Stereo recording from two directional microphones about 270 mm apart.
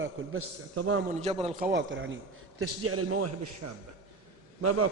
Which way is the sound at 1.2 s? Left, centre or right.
Right.